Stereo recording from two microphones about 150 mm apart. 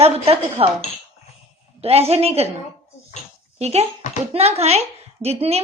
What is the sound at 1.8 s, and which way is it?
Speech, 45° right (ahead or behind).